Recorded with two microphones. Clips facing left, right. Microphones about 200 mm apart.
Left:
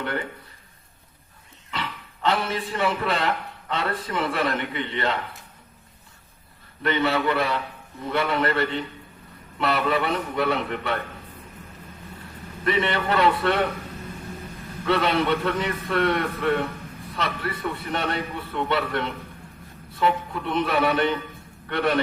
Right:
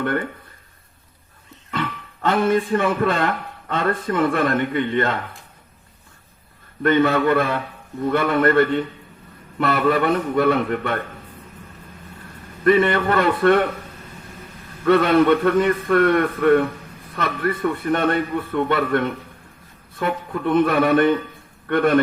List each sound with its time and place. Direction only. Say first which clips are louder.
0.0 s a man's voice: right 6 dB; 50° right (ahead or behind)
1.7 s a man's voice: right 6 dB; 50° right (ahead or behind)
6.8 s a man's voice: right 6 dB; 50° right (ahead or behind)
12.6 s a man's voice: right 7 dB; 50° right (ahead or behind)
14.8 s a man's voice: right 7 dB; 50° right (ahead or behind)